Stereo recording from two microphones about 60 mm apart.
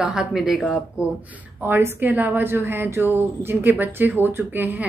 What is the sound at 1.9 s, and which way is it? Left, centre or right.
A woman's voice, right.